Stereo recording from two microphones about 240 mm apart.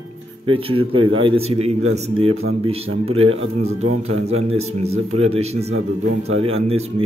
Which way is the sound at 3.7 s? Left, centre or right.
Right.